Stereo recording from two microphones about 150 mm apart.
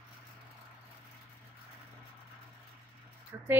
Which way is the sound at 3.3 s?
20° right (ahead or behind).